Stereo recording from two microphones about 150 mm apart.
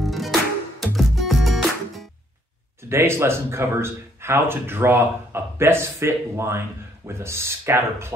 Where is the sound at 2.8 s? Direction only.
15° right (ahead or behind).